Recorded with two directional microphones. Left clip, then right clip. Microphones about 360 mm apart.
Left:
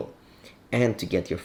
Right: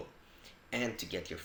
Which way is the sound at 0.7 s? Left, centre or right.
Right.